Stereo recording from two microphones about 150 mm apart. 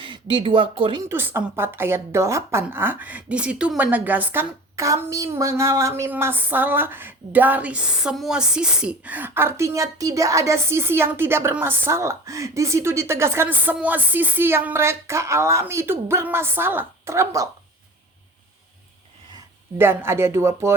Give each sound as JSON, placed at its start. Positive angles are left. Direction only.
{"t": 0.0, "sound": "speech", "side_deg": -35}
{"t": 1.0, "sound": "speech", "side_deg": -15}
{"t": 19.8, "sound": "speech", "side_deg": -15}